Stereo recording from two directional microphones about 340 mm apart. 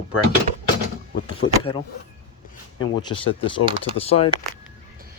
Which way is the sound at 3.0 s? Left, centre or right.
Centre.